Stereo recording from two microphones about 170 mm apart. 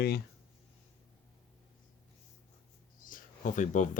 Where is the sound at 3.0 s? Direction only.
50° left (ahead or behind).